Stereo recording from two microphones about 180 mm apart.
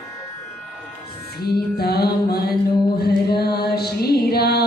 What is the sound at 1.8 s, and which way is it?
Music, 60° left (ahead or behind).